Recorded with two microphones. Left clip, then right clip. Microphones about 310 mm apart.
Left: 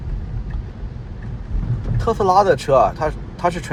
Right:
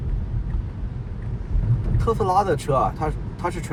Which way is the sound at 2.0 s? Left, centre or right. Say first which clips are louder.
Left 6 dB; left.